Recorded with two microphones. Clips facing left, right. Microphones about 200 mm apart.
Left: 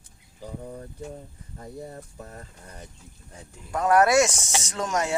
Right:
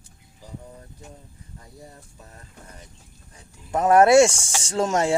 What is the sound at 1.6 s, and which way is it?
Speech, 50° left (ahead or behind).